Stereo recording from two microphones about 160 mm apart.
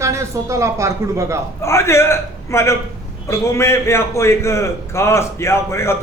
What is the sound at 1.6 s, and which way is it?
A man's voice, 15° left (ahead or behind).